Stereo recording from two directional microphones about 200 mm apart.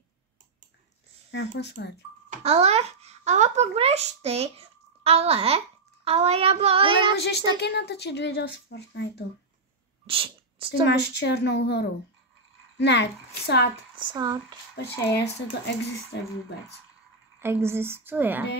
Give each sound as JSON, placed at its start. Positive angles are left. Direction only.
{"t": 1.3, "sound": "a woman's voice", "side_deg": 60}
{"t": 2.2, "sound": "a sound", "side_deg": -30}
{"t": 6.0, "sound": "child singing", "side_deg": -30}
{"t": 7.2, "sound": "a woman's voice", "side_deg": 55}
{"t": 10.0, "sound": "sneeze", "side_deg": -25}
{"t": 10.7, "sound": "a woman's voice", "side_deg": 55}
{"t": 13.9, "sound": "child singing", "side_deg": -20}
{"t": 15.6, "sound": "a woman's voice", "side_deg": 60}
{"t": 17.4, "sound": "a woman's voice", "side_deg": -10}